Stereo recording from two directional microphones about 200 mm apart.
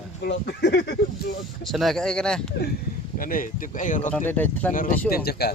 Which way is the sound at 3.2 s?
45° left (ahead or behind).